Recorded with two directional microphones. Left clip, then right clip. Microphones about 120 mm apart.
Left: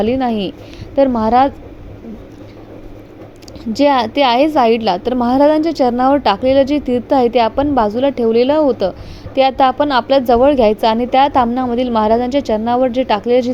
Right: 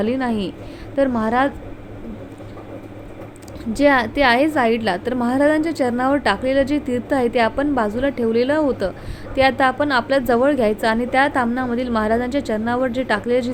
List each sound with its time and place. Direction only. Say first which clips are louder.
0.0 s a woman's voice: left 5 dB; 35° left (ahead or behind)
3.7 s a woman's voice: left 3 dB; 25° left (ahead or behind)